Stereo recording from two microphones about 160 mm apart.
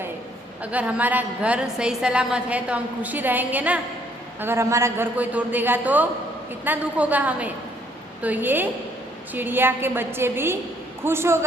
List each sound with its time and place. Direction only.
0.6 s a woman's voice: 10° right (ahead or behind)